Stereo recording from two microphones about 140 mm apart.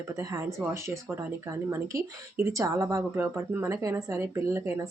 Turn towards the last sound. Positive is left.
turn(degrees=-20)  # may be behind; listen again after turning